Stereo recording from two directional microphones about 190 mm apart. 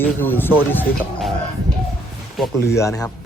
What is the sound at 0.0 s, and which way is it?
A man's voice, 10° left (ahead or behind).